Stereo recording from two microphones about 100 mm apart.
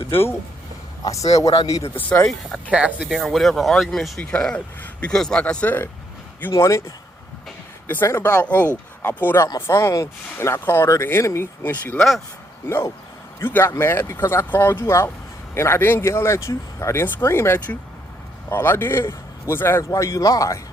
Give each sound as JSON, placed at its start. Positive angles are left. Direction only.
{"t": 0.1, "sound": "speech", "side_deg": 25}
{"t": 1.3, "sound": "speech", "side_deg": 35}
{"t": 2.2, "sound": "speech", "side_deg": 5}
{"t": 2.7, "sound": "speech", "side_deg": -10}
{"t": 4.2, "sound": "speech", "side_deg": 10}
{"t": 6.5, "sound": "speech", "side_deg": 30}
{"t": 8.0, "sound": "speech", "side_deg": 25}
{"t": 11.9, "sound": "speech", "side_deg": 0}
{"t": 12.6, "sound": "speech", "side_deg": 25}